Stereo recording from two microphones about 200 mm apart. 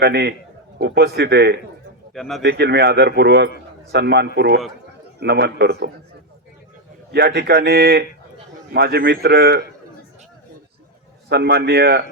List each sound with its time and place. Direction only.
0.0 s speech: 55° right (ahead or behind)
2.1 s speech: centre (ahead or behind)
2.4 s a man's voice: 55° right (ahead or behind)
7.1 s a man's voice: 55° right (ahead or behind)
11.3 s speech: 55° right (ahead or behind)